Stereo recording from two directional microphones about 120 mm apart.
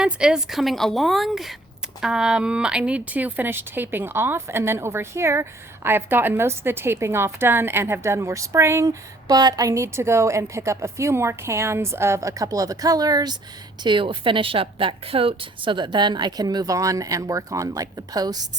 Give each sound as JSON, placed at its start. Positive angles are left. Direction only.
{"t": 0.0, "sound": "a woman's voice", "side_deg": -5}
{"t": 13.8, "sound": "a woman's voice", "side_deg": -45}